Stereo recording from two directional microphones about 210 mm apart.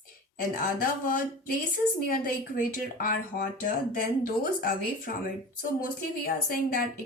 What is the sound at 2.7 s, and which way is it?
Speech, 40° left (ahead or behind).